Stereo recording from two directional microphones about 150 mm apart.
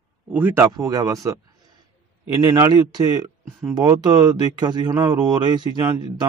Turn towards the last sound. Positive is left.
turn(degrees=-30)  # may be behind; listen again after turning